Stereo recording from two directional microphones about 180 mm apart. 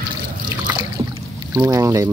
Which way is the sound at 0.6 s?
20° right (ahead or behind).